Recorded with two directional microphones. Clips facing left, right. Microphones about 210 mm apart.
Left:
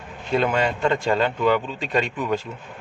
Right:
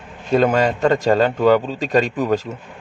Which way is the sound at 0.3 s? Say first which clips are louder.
Right 5 dB; 40° right (ahead or behind).